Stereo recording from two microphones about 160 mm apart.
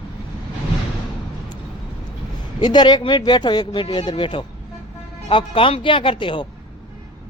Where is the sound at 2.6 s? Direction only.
25° left (ahead or behind).